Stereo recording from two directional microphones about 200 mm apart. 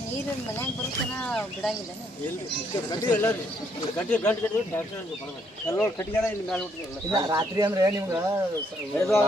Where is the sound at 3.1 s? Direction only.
10° left (ahead or behind).